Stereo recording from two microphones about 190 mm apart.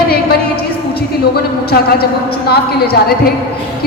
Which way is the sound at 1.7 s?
55° left (ahead or behind).